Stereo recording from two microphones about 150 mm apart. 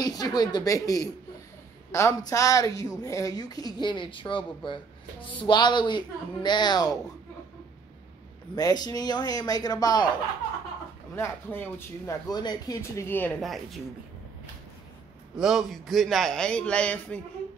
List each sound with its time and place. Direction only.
0.0 s speech: 25° left (ahead or behind)
8.5 s speech: 25° left (ahead or behind)
11.1 s speech: 15° left (ahead or behind)
12.3 s speech: 25° left (ahead or behind)
13.4 s a man's voice: centre (ahead or behind)
15.3 s a man's voice: 5° right (ahead or behind)